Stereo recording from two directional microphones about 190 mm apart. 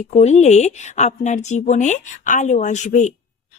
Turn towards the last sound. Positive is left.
turn(degrees=40)  # may be behind; listen again after turning